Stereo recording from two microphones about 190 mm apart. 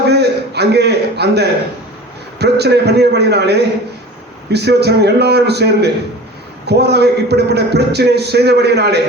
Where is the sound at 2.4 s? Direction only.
60° right (ahead or behind).